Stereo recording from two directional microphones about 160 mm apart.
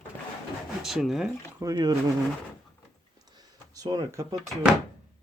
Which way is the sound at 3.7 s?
20° right (ahead or behind).